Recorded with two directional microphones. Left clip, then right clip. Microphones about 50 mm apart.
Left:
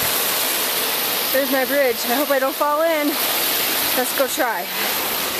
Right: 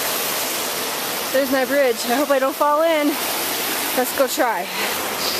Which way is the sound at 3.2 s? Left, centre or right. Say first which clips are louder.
Left 2 dB; left.